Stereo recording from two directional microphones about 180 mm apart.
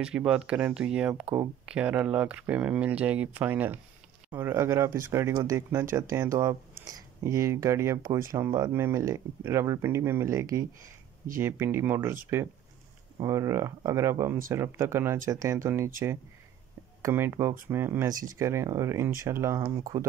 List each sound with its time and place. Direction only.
0.0 s speech: 5° right (ahead or behind)
13.2 s speech: 20° right (ahead or behind)
17.0 s speech: 15° right (ahead or behind)